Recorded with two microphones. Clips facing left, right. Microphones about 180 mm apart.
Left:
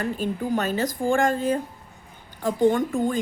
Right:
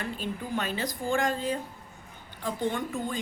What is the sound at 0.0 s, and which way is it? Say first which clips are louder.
A woman's voice: left 8 dB; 45° left (ahead or behind).